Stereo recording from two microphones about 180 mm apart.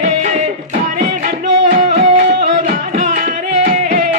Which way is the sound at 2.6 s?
40° right (ahead or behind).